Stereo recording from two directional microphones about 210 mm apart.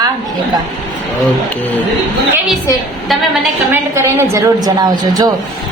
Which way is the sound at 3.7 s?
10° right (ahead or behind).